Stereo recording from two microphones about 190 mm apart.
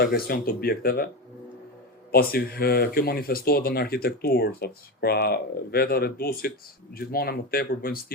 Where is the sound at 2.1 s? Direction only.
55° left (ahead or behind).